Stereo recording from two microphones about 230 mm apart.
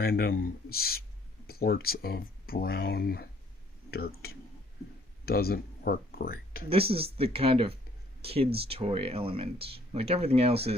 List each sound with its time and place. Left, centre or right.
0.0 s speech: left
6.7 s speech: right